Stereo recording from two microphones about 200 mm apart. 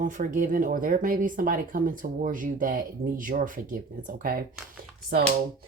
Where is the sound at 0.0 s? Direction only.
40° right (ahead or behind).